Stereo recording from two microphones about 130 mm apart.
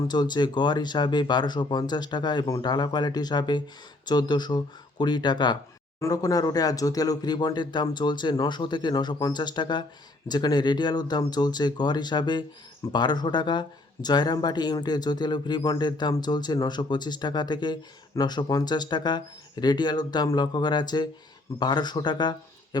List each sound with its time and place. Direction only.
0.1 s a man's voice: 35° left (ahead or behind)